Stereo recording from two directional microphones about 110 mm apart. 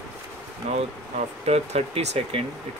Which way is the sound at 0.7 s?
70° right (ahead or behind).